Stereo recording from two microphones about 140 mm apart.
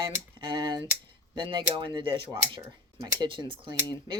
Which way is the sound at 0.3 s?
35° right (ahead or behind).